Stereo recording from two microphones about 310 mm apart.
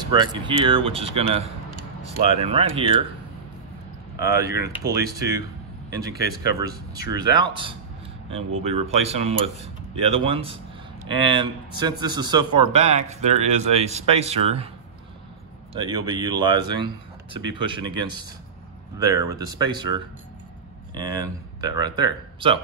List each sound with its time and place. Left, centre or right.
0.1 s speech: centre
4.2 s speech: centre
7.1 s speech: centre
15.8 s speech: centre